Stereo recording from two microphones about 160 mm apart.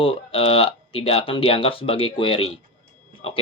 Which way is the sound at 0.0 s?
35° left (ahead or behind).